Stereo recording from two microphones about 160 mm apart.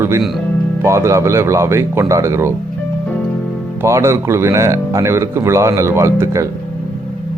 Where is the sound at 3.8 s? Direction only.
15° right (ahead or behind).